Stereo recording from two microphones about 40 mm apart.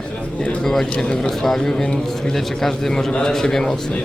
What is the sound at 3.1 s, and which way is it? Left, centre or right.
Speech, left.